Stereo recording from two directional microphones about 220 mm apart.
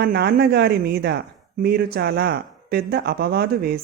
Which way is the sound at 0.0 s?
45° right (ahead or behind).